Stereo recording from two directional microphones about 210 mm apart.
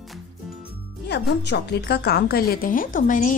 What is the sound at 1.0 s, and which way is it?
A woman's voice, 55° left (ahead or behind).